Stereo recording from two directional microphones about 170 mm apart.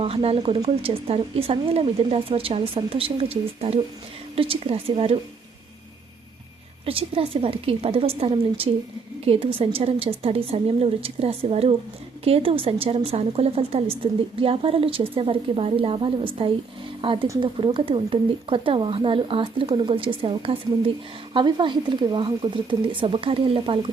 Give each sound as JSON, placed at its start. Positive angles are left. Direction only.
{"t": 0.0, "sound": "a woman's voice", "side_deg": -35}
{"t": 6.8, "sound": "a woman's voice", "side_deg": -35}